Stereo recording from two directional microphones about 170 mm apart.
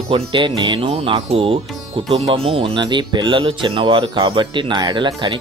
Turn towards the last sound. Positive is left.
turn(degrees=-25)  # may be behind; listen again after turning